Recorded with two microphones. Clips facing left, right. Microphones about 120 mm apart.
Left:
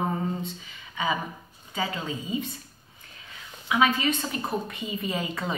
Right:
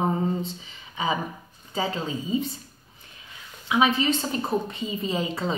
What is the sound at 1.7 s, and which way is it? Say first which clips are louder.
Speech: right 3 dB; 30° right (ahead or behind).